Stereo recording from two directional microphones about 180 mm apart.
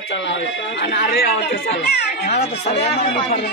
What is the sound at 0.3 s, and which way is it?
Speech, 70° left (ahead or behind).